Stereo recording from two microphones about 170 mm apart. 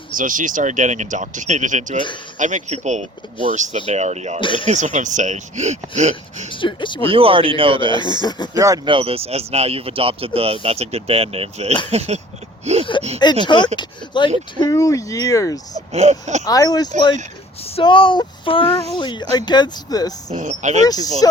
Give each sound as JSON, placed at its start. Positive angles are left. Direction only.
{"t": 0.1, "sound": "speech", "side_deg": -50}
{"t": 4.4, "sound": "speech", "side_deg": 30}
{"t": 4.6, "sound": "speech", "side_deg": -45}
{"t": 6.5, "sound": "speech", "side_deg": 30}
{"t": 7.0, "sound": "speech", "side_deg": -30}
{"t": 8.0, "sound": "speech", "side_deg": 25}
{"t": 8.5, "sound": "speech", "side_deg": -20}
{"t": 12.9, "sound": "speech", "side_deg": 30}
{"t": 15.9, "sound": "speech", "side_deg": -40}
{"t": 16.4, "sound": "speech", "side_deg": 20}
{"t": 20.3, "sound": "speech", "side_deg": -45}
{"t": 20.8, "sound": "speech", "side_deg": 20}